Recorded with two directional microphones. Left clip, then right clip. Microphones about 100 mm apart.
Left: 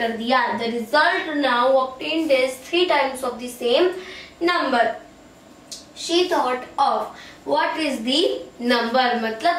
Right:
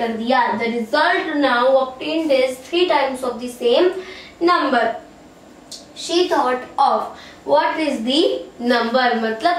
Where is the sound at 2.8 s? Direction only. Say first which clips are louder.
Right 3 dB; 10° right (ahead or behind).